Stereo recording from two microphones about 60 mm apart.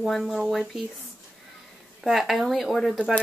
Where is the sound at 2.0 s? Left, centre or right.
Centre.